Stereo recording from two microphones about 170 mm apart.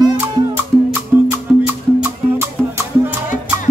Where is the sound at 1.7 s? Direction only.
15° right (ahead or behind).